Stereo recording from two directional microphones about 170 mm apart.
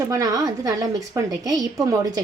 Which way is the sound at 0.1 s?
20° right (ahead or behind).